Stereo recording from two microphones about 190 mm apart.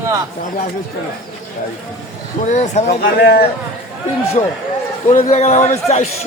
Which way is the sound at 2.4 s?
40° left (ahead or behind).